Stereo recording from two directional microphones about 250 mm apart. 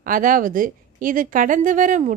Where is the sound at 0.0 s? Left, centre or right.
Right.